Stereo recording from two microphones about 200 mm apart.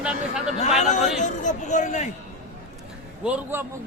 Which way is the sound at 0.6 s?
35° left (ahead or behind).